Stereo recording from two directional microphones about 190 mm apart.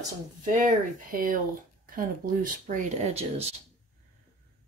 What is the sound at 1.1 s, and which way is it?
Speech, 45° right (ahead or behind).